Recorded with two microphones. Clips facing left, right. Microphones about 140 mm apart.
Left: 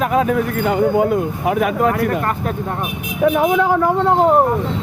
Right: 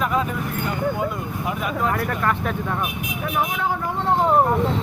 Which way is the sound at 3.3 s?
90° left.